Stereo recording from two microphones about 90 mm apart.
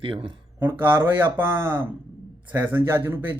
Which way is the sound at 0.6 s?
25° right (ahead or behind).